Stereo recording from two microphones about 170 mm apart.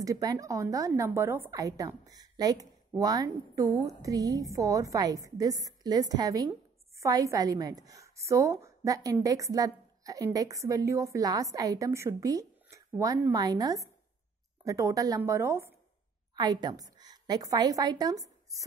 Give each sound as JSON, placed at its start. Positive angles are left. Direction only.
{"t": 0.0, "sound": "a woman's voice", "side_deg": -20}